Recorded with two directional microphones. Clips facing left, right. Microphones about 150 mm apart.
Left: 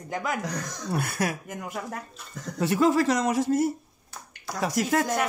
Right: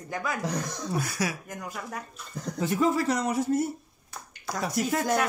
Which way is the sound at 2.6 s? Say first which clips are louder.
Left 3 dB; 75° left (ahead or behind).